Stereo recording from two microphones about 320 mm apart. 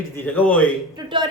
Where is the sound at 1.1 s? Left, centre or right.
Centre.